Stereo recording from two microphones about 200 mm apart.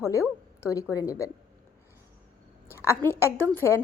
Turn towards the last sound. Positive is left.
turn(degrees=10)  # may be behind; listen again after turning